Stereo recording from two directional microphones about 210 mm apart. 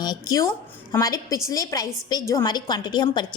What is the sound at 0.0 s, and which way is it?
A woman's voice, 20° left (ahead or behind).